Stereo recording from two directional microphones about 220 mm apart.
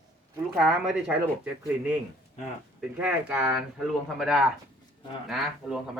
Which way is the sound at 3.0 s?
5° right (ahead or behind).